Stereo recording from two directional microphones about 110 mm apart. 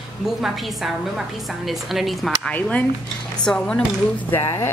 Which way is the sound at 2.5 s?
15° left (ahead or behind).